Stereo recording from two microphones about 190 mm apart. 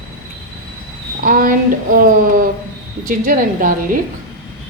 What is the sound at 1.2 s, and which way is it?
Speech, 45° right (ahead or behind).